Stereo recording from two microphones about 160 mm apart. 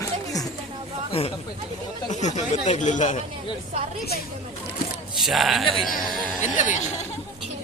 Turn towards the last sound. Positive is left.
turn(degrees=50)  # may be behind; listen again after turning